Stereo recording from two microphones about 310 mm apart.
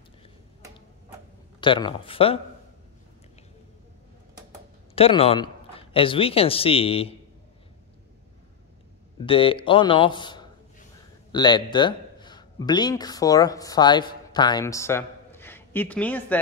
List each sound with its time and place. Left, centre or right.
1.6 s a man's voice: centre
4.9 s a man's voice: centre
9.2 s a man's voice: centre